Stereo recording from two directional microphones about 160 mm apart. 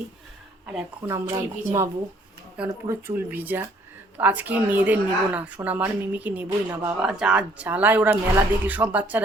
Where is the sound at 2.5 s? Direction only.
15° right (ahead or behind).